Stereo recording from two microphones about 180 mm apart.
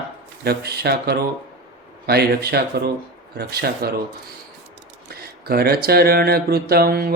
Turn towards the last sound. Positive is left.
turn(degrees=-55)  # may be behind; listen again after turning